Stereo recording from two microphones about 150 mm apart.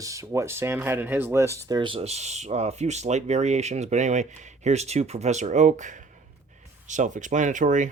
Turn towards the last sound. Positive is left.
turn(degrees=-60)  # may be behind; listen again after turning